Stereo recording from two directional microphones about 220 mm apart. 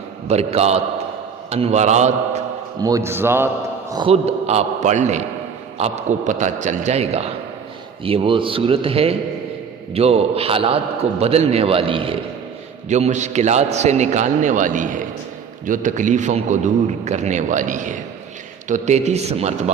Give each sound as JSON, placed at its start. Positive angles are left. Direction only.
{"t": 0.3, "sound": "a man's voice", "side_deg": -30}
{"t": 2.8, "sound": "a man's voice", "side_deg": -15}
{"t": 3.9, "sound": "a man's voice", "side_deg": -25}